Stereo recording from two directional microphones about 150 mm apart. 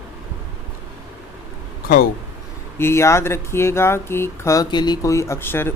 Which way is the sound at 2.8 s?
15° left (ahead or behind).